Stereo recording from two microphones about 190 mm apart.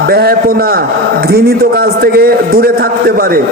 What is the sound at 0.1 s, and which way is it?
A man's voice, 55° right (ahead or behind).